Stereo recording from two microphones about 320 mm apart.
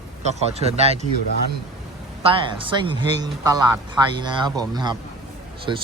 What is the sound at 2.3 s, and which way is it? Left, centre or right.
Speech, centre.